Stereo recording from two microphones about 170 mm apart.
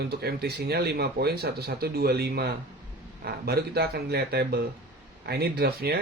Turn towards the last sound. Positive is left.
turn(degrees=-70)  # may be behind; listen again after turning